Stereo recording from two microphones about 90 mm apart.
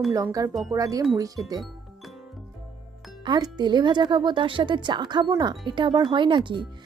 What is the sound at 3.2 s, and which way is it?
Speech, 50° right (ahead or behind).